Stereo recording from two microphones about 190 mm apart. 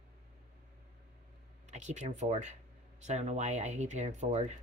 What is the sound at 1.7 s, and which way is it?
Speech, 40° right (ahead or behind).